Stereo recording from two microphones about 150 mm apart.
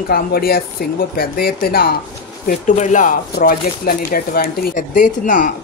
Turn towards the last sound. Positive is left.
turn(degrees=60)  # may be behind; listen again after turning